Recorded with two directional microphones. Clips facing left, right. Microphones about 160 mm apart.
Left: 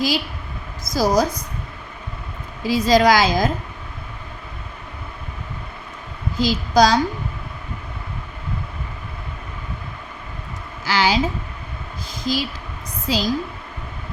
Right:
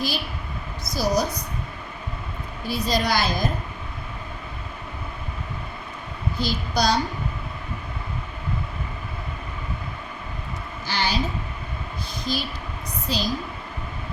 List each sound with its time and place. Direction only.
0.9 s a woman's voice: 90° left
2.6 s a woman's voice: 90° left
6.3 s a woman's voice: 90° left
10.8 s a sound: 90° left
12.2 s a woman's voice: 90° left